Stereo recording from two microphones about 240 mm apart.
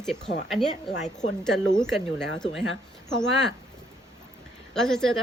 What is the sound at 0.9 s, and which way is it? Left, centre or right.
Speech, left.